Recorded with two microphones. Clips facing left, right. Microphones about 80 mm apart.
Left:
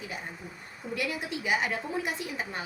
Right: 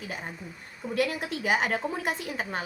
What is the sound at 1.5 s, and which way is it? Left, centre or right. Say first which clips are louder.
A woman's voice: right 3 dB; right.